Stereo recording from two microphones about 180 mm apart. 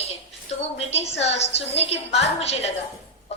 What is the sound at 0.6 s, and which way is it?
A woman's voice, 35° left (ahead or behind).